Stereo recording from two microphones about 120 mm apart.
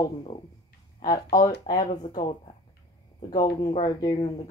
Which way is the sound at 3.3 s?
40° left (ahead or behind).